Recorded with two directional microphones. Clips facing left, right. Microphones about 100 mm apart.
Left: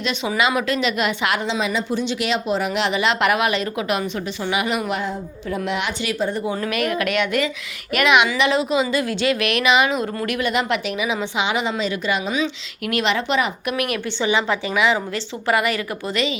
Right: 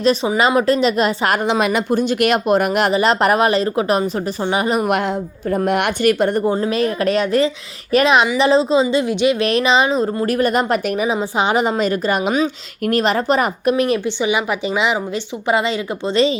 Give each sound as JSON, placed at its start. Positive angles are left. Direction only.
{"t": 0.0, "sound": "a woman's voice", "side_deg": -40}
{"t": 2.9, "sound": "a woman's voice", "side_deg": -40}
{"t": 4.9, "sound": "a woman's voice", "side_deg": -60}
{"t": 5.5, "sound": "a woman's voice", "side_deg": -45}
{"t": 6.6, "sound": "a woman's voice", "side_deg": -30}
{"t": 9.4, "sound": "a woman's voice", "side_deg": -30}
{"t": 13.7, "sound": "a woman's voice", "side_deg": -30}
{"t": 14.0, "sound": "a woman's voice", "side_deg": -15}